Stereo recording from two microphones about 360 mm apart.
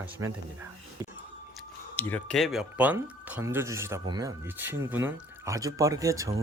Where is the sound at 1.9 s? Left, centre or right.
Centre.